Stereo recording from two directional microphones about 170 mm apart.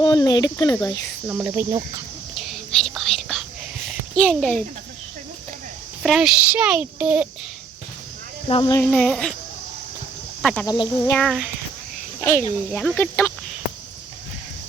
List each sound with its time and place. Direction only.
0.0 s speech: 25° left (ahead or behind)
1.3 s cricket: 10° right (ahead or behind)
2.4 s whispering: centre (ahead or behind)
3.8 s a sound: centre (ahead or behind)
6.0 s a child's voice: centre (ahead or behind)
8.4 s speech: 30° left (ahead or behind)
8.9 s a child's voice: 5° left (ahead or behind)
10.4 s speech: 5° left (ahead or behind)
10.7 s speech: 25° left (ahead or behind)
11.1 s a child's voice: 5° left (ahead or behind)
12.2 s speech: 15° left (ahead or behind)